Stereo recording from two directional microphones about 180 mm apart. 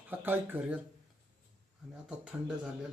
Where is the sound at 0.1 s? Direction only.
10° right (ahead or behind).